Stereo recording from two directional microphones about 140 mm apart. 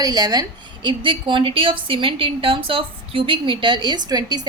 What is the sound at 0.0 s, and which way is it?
A woman's voice, 30° right (ahead or behind).